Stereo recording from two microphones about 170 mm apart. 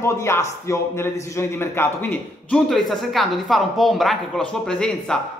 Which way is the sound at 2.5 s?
Centre (ahead or behind).